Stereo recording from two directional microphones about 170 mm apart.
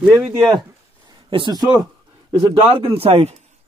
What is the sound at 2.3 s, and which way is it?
A man's voice, 25° right (ahead or behind).